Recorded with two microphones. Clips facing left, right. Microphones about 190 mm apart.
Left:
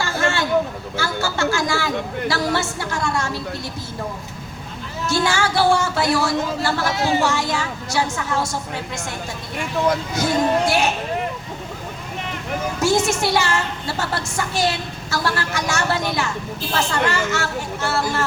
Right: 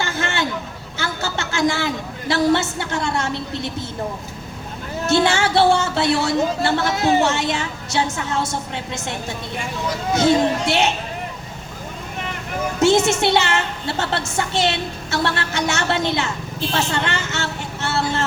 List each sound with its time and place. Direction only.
0.0 s hubbub: 20° right (ahead or behind)
0.9 s a sound: 20° right (ahead or behind)
5.0 s a woman's voice: 25° right (ahead or behind)
10.2 s a woman's voice: 25° right (ahead or behind)
13.1 s a woman's voice: 25° right (ahead or behind)